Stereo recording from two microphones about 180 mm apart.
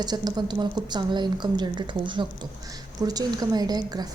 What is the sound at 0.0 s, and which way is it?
A woman's voice, 20° right (ahead or behind).